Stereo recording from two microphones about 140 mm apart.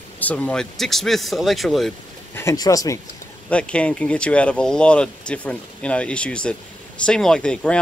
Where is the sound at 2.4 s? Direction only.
20° left (ahead or behind).